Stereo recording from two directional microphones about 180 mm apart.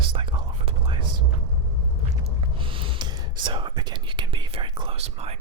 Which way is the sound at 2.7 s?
25° right (ahead or behind).